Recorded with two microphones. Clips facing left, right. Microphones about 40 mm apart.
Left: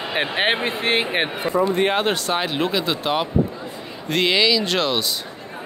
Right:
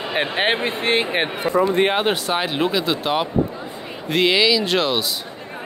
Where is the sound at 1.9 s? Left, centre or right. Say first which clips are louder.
Right 1 dB; centre.